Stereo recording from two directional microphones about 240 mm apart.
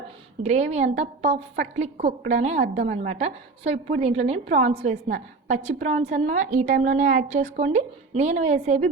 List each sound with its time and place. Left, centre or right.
0.4 s a woman's voice: right
2.8 s a woman's voice: right
3.1 s a woman's voice: right